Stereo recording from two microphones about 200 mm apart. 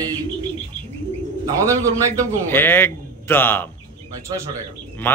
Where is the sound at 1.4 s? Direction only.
15° right (ahead or behind).